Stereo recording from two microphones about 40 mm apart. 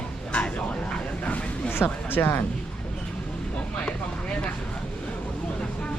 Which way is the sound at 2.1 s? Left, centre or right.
Left.